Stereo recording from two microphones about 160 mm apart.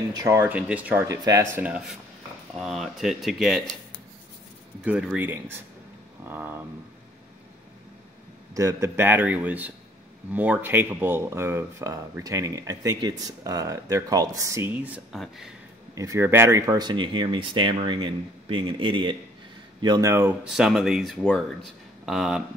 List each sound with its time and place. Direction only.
0.1 s a man's voice: 20° right (ahead or behind)
1.0 s a man's voice: 20° right (ahead or behind); by 3.6 s centre (ahead or behind)
4.8 s a man's voice: 10° right (ahead or behind)
8.5 s a man's voice: 20° right (ahead or behind)
15.1 s speech: centre (ahead or behind)
15.9 s speech: 20° right (ahead or behind); by 22.4 s 5° right (ahead or behind)